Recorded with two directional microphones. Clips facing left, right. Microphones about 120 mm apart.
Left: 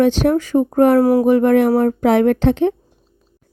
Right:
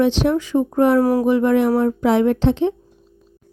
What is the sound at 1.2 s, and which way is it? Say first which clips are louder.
Speech: left 3 dB; 50° left (ahead or behind).